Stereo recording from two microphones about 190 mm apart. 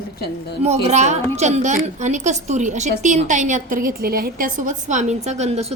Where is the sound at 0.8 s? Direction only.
35° right (ahead or behind).